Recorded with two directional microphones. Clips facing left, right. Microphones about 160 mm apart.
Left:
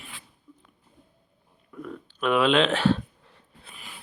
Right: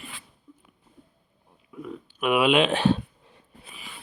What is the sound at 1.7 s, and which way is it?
Speech, 10° right (ahead or behind).